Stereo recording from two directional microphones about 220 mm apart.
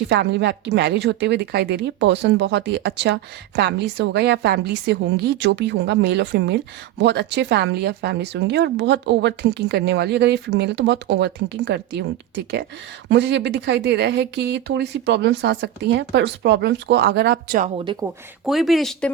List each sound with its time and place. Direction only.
0.1 s a woman's voice: 50° right (ahead or behind)
13.1 s a woman's voice: 50° right (ahead or behind)
18.0 s speech: centre (ahead or behind)